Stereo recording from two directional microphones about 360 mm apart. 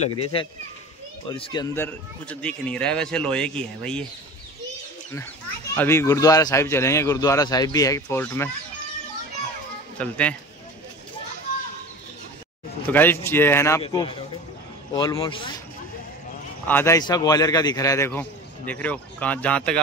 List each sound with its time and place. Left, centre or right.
0.0 s a man's voice: centre
5.8 s a man's voice: centre
9.9 s a man's voice: centre
12.9 s a man's voice: centre
16.6 s a man's voice: centre